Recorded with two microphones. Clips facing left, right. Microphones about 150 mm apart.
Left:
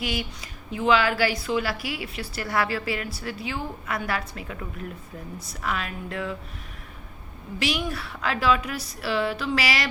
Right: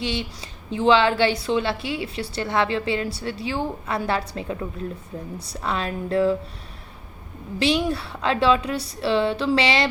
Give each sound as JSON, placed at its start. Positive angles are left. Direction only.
{"t": 0.0, "sound": "a woman's voice", "side_deg": -30}
{"t": 7.6, "sound": "a woman's voice", "side_deg": -30}